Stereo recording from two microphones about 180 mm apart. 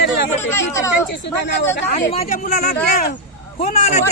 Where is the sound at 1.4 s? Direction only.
75° left (ahead or behind).